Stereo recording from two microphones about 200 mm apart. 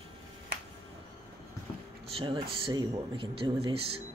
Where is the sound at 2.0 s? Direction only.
25° right (ahead or behind).